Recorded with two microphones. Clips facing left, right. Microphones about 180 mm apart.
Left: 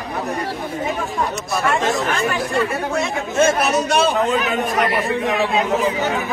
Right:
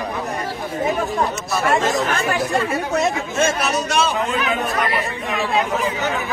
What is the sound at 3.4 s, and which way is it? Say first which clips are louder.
Speech: left 4 dB; 55° left (ahead or behind).